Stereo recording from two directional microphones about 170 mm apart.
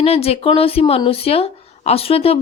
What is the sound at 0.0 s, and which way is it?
Speech, 35° left (ahead or behind).